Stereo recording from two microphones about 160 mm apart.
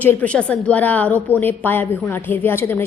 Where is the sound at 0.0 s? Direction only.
10° left (ahead or behind).